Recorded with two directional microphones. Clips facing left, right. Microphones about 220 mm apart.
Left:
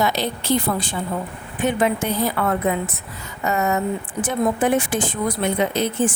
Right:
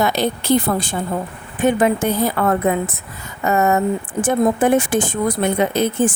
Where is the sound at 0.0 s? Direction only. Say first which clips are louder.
Right 3 dB; 50° right (ahead or behind).